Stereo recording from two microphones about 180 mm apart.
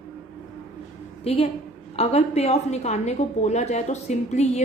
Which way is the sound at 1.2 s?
35° left (ahead or behind).